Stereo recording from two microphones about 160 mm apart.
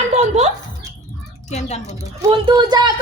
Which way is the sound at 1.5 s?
45° left (ahead or behind).